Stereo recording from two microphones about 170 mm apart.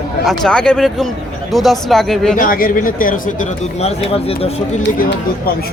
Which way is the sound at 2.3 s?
55° left (ahead or behind).